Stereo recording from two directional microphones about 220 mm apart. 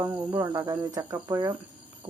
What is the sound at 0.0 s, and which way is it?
Speech, 10° right (ahead or behind).